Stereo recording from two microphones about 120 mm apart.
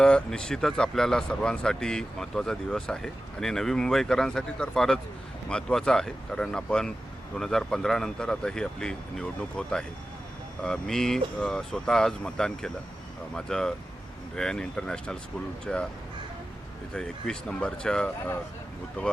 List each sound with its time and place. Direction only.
0.0 s speech: 5° left (ahead or behind)
16.9 s speech: 5° left (ahead or behind)